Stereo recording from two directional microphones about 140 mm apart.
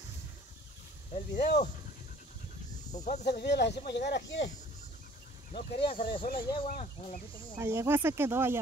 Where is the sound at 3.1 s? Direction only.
80° left.